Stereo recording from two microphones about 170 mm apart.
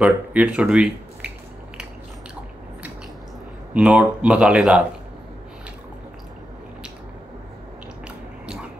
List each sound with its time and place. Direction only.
0.0 s speech: 10° right (ahead or behind)
3.7 s speech: 5° right (ahead or behind)